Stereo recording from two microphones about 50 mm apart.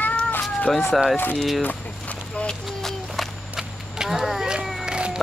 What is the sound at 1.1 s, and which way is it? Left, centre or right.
Speech, left.